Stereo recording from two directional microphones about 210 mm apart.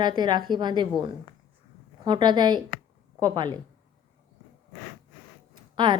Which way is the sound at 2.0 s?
20° right (ahead or behind).